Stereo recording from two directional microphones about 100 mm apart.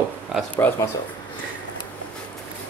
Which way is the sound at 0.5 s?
20° left (ahead or behind).